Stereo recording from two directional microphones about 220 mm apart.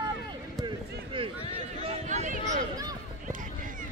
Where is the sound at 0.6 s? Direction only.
20° right (ahead or behind).